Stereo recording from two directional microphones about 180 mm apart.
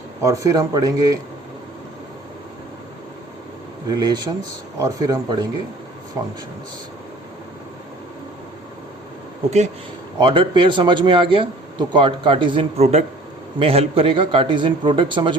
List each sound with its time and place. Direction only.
0.2 s speech: 20° right (ahead or behind)
3.8 s speech: 25° right (ahead or behind)
10.2 s speech: 25° right (ahead or behind)